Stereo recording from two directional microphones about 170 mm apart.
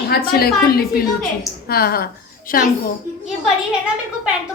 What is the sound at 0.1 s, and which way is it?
A woman's voice, 65° left (ahead or behind).